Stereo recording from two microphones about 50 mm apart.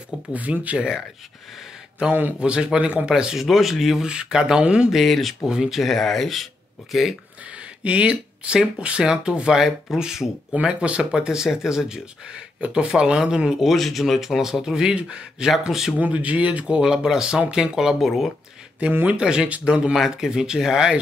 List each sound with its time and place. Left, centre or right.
0.3 s speech: right
0.7 s speech: centre
2.4 s speech: centre
3.3 s speech: centre
4.0 s speech: centre
4.9 s speech: centre
5.5 s speech: centre
5.8 s speech: centre
7.5 s speech: right
9.6 s speech: centre
16.0 s speech: right
16.8 s speech: centre
19.0 s speech: centre
19.9 s speech: centre